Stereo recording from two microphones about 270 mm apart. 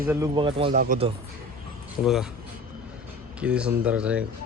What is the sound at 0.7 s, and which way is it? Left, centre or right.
Speech, right.